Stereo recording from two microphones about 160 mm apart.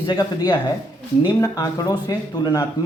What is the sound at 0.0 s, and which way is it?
Speech, 25° left (ahead or behind).